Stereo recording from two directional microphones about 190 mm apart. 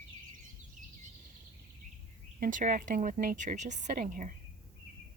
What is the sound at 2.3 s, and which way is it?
Speech, 45° right (ahead or behind).